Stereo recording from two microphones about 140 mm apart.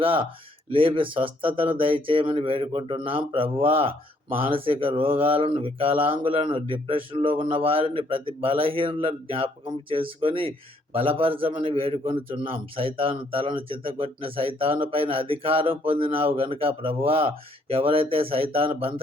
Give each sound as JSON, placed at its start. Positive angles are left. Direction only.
{"t": 0.0, "sound": "mantra", "side_deg": -40}